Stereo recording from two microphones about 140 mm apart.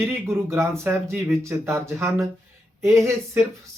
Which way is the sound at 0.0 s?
20° right (ahead or behind).